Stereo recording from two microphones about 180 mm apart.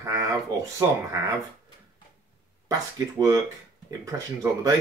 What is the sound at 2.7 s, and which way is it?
Speech, 20° right (ahead or behind).